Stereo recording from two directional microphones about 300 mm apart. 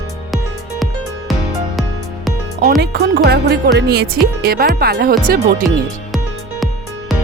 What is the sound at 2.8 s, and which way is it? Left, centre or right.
Music, right.